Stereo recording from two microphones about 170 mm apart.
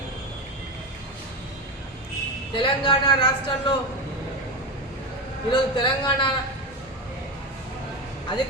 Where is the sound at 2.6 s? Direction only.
30° left (ahead or behind).